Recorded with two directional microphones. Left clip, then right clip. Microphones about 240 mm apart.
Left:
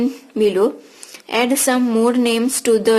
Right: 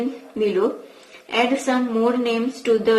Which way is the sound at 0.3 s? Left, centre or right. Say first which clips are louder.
Left 4 dB; left.